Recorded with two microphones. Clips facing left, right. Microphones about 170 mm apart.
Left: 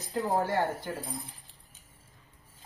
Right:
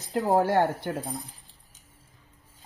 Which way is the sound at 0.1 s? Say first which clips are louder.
Right 6 dB; 65° right (ahead or behind).